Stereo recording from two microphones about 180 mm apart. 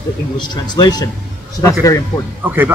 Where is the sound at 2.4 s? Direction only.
10° right (ahead or behind).